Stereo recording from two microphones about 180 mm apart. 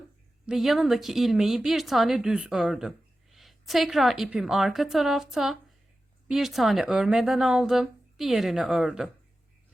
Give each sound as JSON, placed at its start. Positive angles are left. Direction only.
{"t": 0.4, "sound": "speech", "side_deg": 0}